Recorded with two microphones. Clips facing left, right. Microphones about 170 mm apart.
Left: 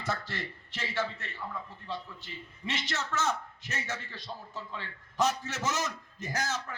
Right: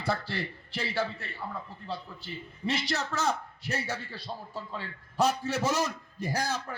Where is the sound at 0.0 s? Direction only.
30° right (ahead or behind).